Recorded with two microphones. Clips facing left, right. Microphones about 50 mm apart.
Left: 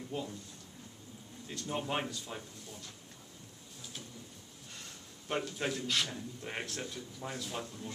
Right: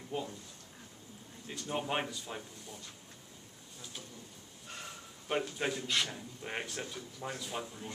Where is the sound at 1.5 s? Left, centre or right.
Centre.